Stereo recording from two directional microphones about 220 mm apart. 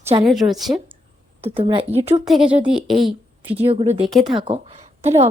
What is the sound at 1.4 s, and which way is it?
Speech, 25° right (ahead or behind).